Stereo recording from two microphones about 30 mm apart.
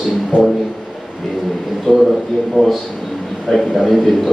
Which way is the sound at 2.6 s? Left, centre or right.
Right.